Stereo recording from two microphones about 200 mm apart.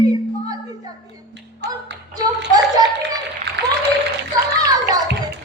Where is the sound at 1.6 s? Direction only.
60° right (ahead or behind).